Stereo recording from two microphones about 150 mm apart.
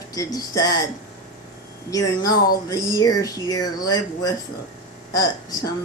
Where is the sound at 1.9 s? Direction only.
25° left (ahead or behind).